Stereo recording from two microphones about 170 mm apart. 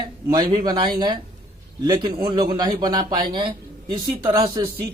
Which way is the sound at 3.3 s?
25° right (ahead or behind).